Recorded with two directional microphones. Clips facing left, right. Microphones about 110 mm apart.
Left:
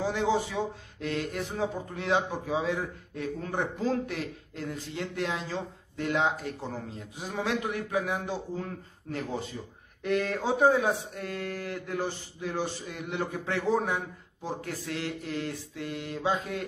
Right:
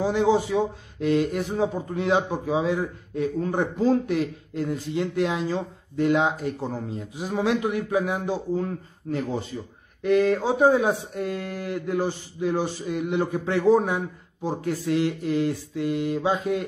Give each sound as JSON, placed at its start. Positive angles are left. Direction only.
{"t": 0.0, "sound": "speech", "side_deg": -15}